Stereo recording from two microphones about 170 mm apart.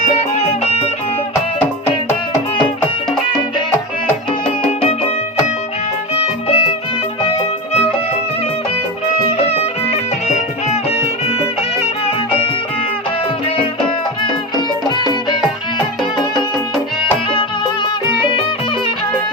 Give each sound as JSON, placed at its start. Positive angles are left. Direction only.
{"t": 0.3, "sound": "music", "side_deg": 35}
{"t": 4.8, "sound": "music", "side_deg": 35}
{"t": 6.1, "sound": "music", "side_deg": 35}
{"t": 14.8, "sound": "music", "side_deg": 25}